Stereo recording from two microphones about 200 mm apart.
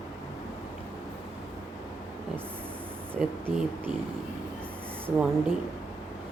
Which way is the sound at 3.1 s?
10° right (ahead or behind).